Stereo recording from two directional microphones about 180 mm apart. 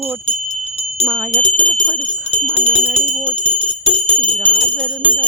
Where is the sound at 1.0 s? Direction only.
10° right (ahead or behind).